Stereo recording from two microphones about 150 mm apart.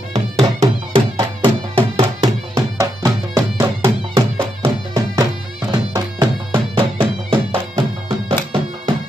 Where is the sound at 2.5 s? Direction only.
20° right (ahead or behind).